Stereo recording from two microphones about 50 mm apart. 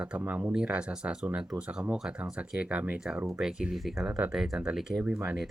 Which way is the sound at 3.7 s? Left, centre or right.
Centre.